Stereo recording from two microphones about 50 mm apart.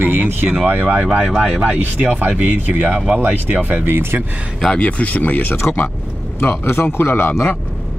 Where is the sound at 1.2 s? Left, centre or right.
Centre; by 4.2 s right.